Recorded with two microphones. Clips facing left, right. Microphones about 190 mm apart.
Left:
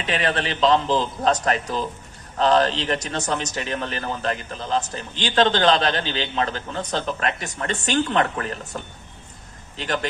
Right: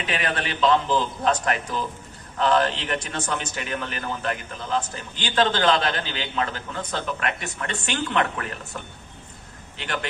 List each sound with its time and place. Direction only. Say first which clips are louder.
0.1 s a man's voice: left 5 dB; 35° left (ahead or behind)